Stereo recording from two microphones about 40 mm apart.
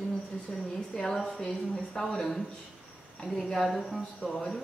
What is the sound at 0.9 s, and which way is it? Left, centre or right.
A man's voice, centre.